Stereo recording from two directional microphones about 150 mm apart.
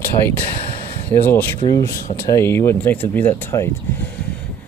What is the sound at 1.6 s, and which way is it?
Speech, 25° left (ahead or behind).